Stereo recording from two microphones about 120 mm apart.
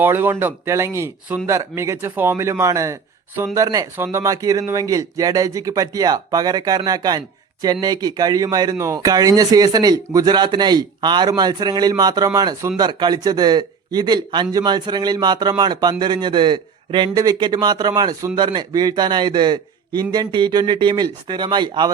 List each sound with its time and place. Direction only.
0.0 s a man's voice: 15° right (ahead or behind); by 21.9 s 40° right (ahead or behind)